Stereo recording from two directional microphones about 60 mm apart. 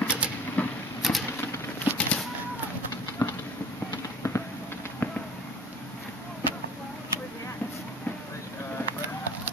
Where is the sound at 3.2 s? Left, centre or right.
Left.